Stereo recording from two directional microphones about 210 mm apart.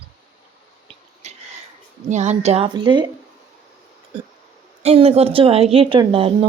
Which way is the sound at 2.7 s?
20° right (ahead or behind).